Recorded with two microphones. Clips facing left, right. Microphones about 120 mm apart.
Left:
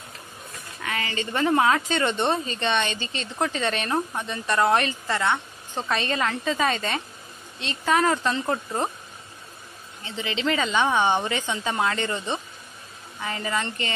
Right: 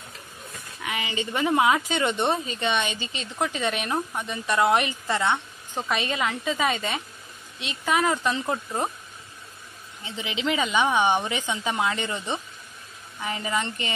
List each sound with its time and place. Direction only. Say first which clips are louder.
0.8 s speech: even; 15° right (ahead or behind)
10.0 s speech: left 2 dB; 15° right (ahead or behind)